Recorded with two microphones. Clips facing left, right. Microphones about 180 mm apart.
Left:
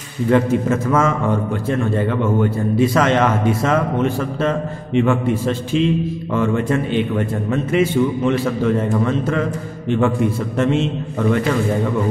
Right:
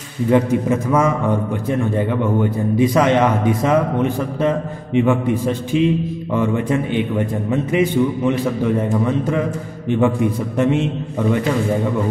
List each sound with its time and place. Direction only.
0.3 s a man's voice: 15° right (ahead or behind)